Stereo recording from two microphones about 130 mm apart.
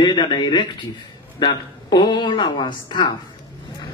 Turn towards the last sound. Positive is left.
turn(degrees=35)  # may be behind; listen again after turning